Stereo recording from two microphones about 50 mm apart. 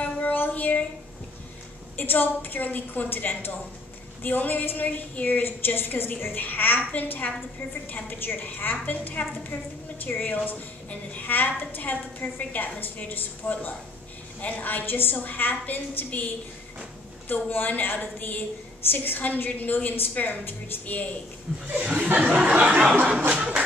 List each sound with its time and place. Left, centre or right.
0.0 s child singing: left
2.0 s a woman's voice: left
6.8 s a woman's voice: left
17.3 s a woman's voice: left
21.6 s speech: right
23.2 s a sound: right